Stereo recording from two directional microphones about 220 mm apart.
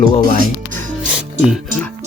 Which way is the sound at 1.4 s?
Centre (ahead or behind).